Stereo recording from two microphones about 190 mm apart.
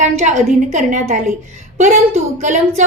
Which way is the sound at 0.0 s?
40° right (ahead or behind).